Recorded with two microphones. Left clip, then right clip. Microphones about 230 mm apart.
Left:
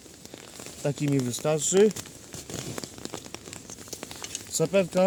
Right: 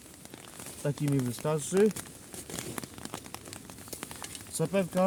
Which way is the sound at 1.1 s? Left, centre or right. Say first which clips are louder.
Left 4 dB; right.